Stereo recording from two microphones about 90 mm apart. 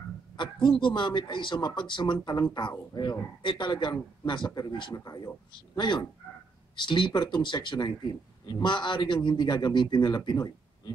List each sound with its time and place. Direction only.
0.4 s speech: 65° left (ahead or behind); by 5.3 s 45° left (ahead or behind)
5.5 s speech: 60° left (ahead or behind)